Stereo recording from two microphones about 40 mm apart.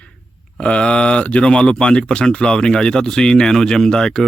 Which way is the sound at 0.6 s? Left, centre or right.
Left.